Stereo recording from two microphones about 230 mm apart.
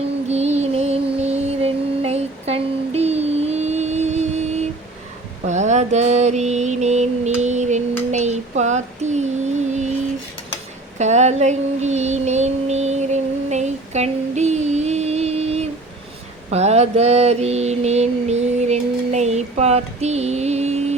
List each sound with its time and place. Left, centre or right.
0.3 s music: right
5.5 s mantra: right
8.1 s child singing: right
10.9 s a sound: right